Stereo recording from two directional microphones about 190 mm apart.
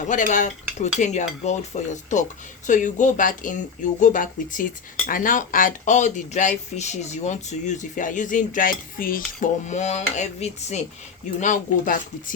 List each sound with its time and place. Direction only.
0.1 s speech: 40° left (ahead or behind)